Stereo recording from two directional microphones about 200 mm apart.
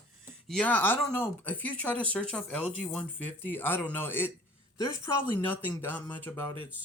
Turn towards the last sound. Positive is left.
turn(degrees=10)  # may be behind; listen again after turning